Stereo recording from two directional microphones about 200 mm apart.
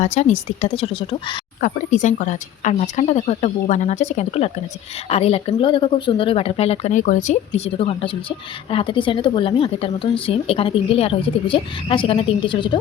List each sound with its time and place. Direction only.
0.0 s speech: 35° left (ahead or behind)
1.6 s speech: 40° left (ahead or behind)